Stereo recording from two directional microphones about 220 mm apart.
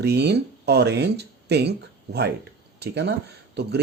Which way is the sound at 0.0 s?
50° right (ahead or behind).